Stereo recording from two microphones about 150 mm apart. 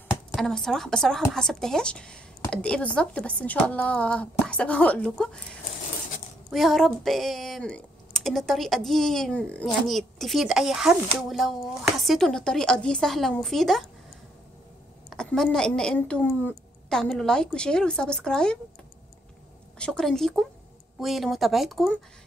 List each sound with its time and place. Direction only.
0.3 s speech: 5° left (ahead or behind)
15.0 s speech: 5° left (ahead or behind)
19.8 s speech: 5° left (ahead or behind)